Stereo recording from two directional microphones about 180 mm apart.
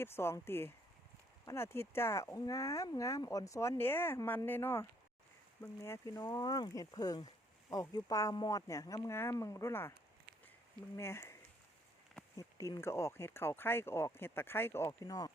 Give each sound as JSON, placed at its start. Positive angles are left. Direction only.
{"t": 0.0, "sound": "speech", "side_deg": 15}
{"t": 10.9, "sound": "speech", "side_deg": 15}
{"t": 12.4, "sound": "speech", "side_deg": 20}